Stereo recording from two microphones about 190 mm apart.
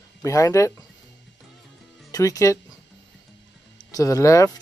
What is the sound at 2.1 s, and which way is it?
Speech, 15° left (ahead or behind).